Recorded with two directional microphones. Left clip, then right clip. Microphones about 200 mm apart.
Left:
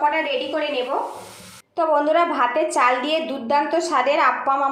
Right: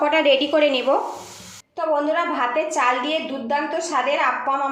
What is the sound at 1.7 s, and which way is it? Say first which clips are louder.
A woman's voice: left 3 dB; 35° left (ahead or behind).